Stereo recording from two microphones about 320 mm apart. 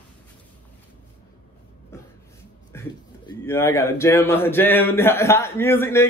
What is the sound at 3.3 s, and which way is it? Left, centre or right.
A man's voice, centre.